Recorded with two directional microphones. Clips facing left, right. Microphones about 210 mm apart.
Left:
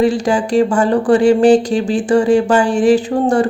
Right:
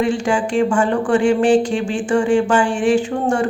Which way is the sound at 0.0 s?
35° left (ahead or behind).